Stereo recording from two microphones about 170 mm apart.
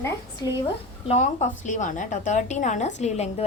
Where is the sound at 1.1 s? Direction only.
40° left (ahead or behind).